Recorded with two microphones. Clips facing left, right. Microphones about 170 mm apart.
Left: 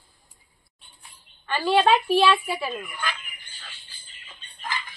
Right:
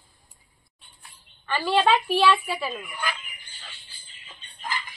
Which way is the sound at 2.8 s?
10° right (ahead or behind).